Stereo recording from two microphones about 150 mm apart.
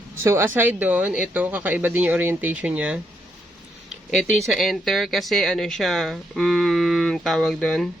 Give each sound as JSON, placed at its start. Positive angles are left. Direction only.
{"t": 0.2, "sound": "speech", "side_deg": -15}
{"t": 4.1, "sound": "speech", "side_deg": 0}